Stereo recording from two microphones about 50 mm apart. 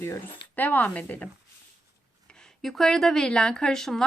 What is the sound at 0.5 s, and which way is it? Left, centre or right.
Speech, left.